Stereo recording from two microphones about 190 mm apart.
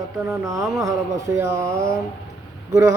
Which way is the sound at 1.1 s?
15° right (ahead or behind).